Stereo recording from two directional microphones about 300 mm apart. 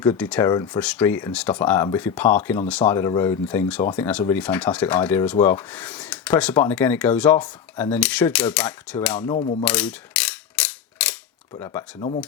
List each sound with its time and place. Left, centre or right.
0.0 s speech: centre
9.3 s speech: left
9.6 s mechanisms: centre
11.6 s speech: centre